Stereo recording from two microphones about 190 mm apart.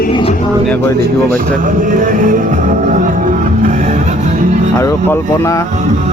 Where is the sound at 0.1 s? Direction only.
25° left (ahead or behind).